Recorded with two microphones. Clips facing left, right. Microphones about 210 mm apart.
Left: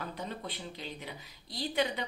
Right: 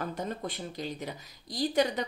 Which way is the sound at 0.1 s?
45° right (ahead or behind).